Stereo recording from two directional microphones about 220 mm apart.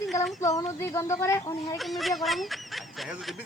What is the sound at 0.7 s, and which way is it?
Speech, 15° left (ahead or behind).